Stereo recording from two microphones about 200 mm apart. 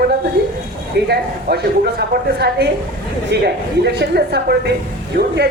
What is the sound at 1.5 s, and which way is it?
A woman's voice, 50° right (ahead or behind).